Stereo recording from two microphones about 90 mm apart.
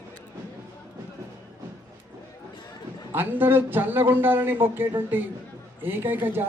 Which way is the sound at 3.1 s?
20° right (ahead or behind).